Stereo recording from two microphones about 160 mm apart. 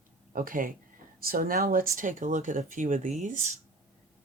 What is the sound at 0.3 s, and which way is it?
Speech, 60° right (ahead or behind).